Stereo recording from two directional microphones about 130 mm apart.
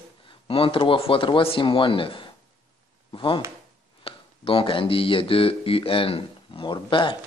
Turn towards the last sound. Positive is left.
turn(degrees=40)  # may be behind; listen again after turning